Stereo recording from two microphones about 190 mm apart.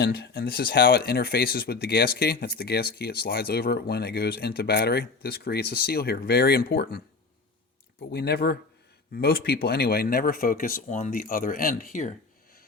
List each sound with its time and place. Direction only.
0.0 s speech: 55° left (ahead or behind)
8.1 s speech: 55° left (ahead or behind)